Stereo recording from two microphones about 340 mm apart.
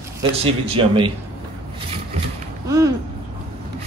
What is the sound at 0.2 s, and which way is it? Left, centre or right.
Speech, centre.